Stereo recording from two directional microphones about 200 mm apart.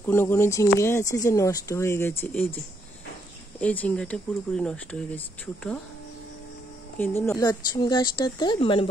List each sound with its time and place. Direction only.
0.0 s speech: 10° left (ahead or behind)
3.6 s speech: 10° left (ahead or behind)
7.0 s speech: 10° left (ahead or behind)